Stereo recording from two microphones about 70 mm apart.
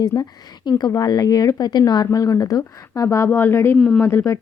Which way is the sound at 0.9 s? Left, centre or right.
Left.